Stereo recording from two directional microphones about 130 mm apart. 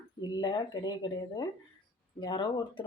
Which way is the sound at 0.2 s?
35° left (ahead or behind).